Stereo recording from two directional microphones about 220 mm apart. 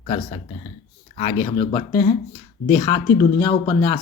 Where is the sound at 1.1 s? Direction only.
25° left (ahead or behind).